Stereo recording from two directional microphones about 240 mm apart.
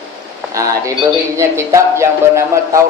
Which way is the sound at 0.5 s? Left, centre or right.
Centre.